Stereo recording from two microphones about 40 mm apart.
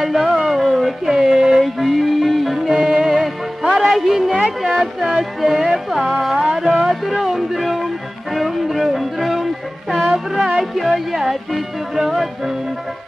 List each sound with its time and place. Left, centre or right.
0.0 s a sound: centre
1.6 s music: centre
2.7 s music: centre
3.7 s music: centre
5.4 s speech: centre
6.5 s music: centre